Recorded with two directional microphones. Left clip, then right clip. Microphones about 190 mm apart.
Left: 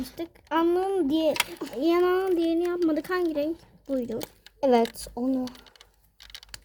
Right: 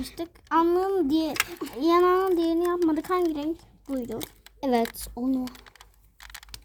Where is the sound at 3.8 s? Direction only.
20° right (ahead or behind).